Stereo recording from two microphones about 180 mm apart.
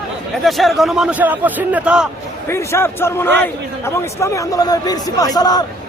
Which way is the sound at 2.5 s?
15° left (ahead or behind).